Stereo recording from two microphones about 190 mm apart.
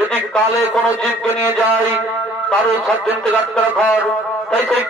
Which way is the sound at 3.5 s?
5° left (ahead or behind).